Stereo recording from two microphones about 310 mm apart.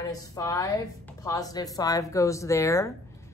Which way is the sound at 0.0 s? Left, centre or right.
Centre.